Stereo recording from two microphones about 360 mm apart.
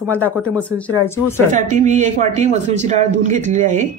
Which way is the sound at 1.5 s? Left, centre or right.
Centre.